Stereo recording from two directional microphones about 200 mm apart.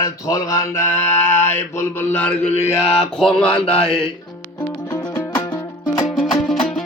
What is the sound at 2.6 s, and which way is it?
Mantra, 30° left (ahead or behind).